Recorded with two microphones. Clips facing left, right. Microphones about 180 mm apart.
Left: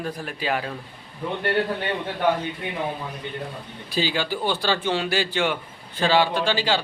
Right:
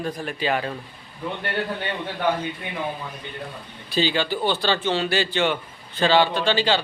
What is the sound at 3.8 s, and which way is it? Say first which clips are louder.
A man's voice: right 2 dB; 10° left (ahead or behind).